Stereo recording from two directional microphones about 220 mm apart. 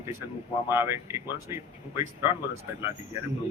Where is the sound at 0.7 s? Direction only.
10° right (ahead or behind).